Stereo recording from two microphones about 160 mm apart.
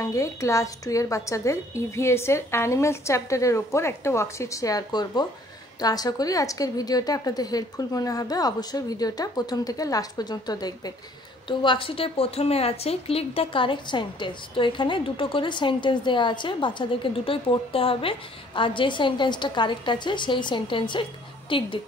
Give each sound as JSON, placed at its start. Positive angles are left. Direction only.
{"t": 0.0, "sound": "a woman's voice", "side_deg": 20}